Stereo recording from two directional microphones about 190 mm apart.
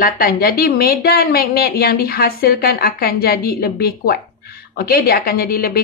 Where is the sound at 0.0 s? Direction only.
50° left (ahead or behind).